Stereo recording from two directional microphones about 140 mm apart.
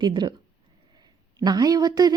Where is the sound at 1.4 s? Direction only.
30° right (ahead or behind).